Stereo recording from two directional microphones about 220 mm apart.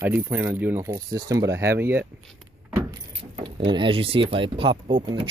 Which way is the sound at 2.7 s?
20° right (ahead or behind).